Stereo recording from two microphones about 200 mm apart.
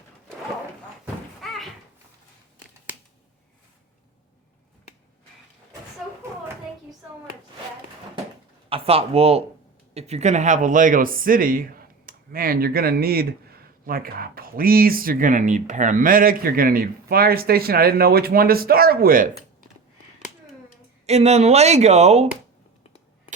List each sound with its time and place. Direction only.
1.0 s a sound: centre (ahead or behind)
8.7 s speech: 30° right (ahead or behind); by 19.3 s 45° right (ahead or behind)
21.1 s speech: 35° right (ahead or behind)